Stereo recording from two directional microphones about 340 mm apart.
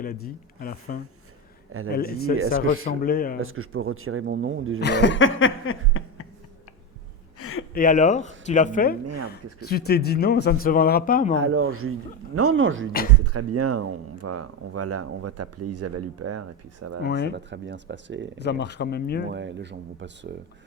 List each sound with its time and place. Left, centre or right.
0.0 s speech: left
1.7 s speech: right
2.8 s speech: left
3.4 s speech: right
4.8 s a sound: left
7.3 s a sound: left
7.7 s speech: left
11.3 s speech: right
17.0 s speech: left
17.3 s speech: right
18.3 s speech: left
19.3 s speech: right